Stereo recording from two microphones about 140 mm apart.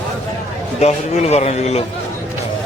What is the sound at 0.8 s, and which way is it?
A man's voice, 50° left (ahead or behind).